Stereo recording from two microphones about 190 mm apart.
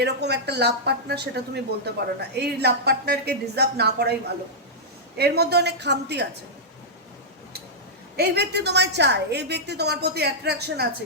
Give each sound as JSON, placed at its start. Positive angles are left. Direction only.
{"t": 0.0, "sound": "a woman's voice", "side_deg": -60}
{"t": 5.1, "sound": "a woman's voice", "side_deg": -55}
{"t": 8.1, "sound": "a woman's voice", "side_deg": -60}